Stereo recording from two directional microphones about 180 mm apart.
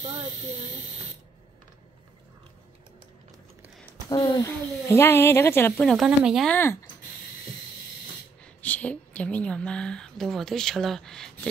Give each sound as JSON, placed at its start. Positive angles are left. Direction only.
{"t": 0.0, "sound": "speech", "side_deg": -35}
{"t": 4.1, "sound": "speech", "side_deg": 20}
{"t": 6.5, "sound": "speech", "side_deg": 15}
{"t": 8.5, "sound": "a woman's voice", "side_deg": 10}